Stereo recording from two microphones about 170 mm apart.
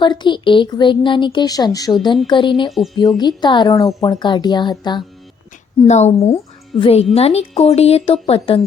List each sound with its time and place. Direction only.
0.0 s speech: 25° left (ahead or behind)
2.6 s speech: centre (ahead or behind)
3.2 s speech: 25° left (ahead or behind)
5.9 s speech: 40° left (ahead or behind)
6.3 s speech: 30° left (ahead or behind)